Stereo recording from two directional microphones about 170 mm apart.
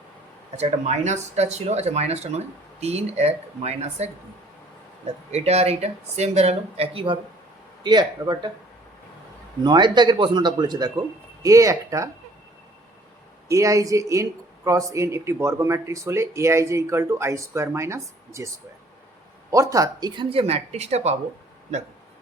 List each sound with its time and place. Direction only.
0.5 s speech: 40° right (ahead or behind)
5.3 s speech: 40° right (ahead or behind)
9.6 s speech: 25° right (ahead or behind)
13.5 s speech: 20° right (ahead or behind)
19.5 s speech: 20° right (ahead or behind); by 21.2 s 40° right (ahead or behind)